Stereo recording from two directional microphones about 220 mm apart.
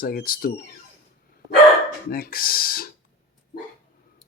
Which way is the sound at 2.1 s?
40° left (ahead or behind).